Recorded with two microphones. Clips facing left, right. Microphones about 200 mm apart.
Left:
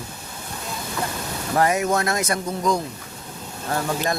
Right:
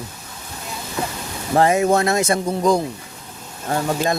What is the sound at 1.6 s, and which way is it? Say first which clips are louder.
Speech: right 5 dB; 25° right (ahead or behind).